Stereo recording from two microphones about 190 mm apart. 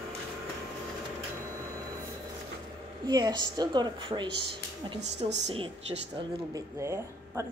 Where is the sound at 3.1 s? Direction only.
20° right (ahead or behind).